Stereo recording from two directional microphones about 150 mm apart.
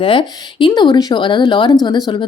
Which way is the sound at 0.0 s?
35° left (ahead or behind).